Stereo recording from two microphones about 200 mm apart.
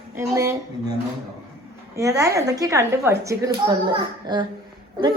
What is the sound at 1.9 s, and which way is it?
A child's voice, 15° right (ahead or behind).